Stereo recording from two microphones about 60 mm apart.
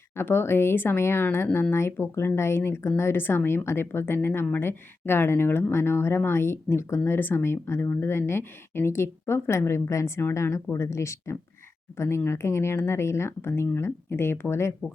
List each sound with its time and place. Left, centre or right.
0.2 s speech: left
4.0 s speech: left